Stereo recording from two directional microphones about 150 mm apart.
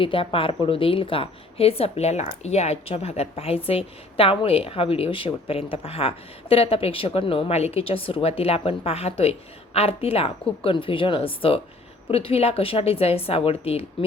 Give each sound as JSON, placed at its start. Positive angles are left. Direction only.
{"t": 0.0, "sound": "a woman's voice", "side_deg": 35}